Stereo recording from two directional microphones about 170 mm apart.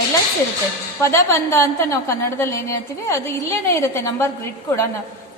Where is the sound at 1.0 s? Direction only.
15° left (ahead or behind).